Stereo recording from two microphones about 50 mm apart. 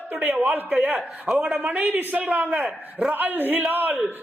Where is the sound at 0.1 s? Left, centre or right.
Right.